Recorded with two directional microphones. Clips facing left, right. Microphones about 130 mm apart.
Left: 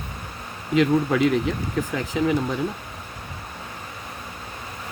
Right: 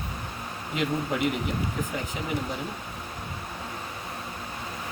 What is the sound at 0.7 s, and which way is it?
Speech, 90° left.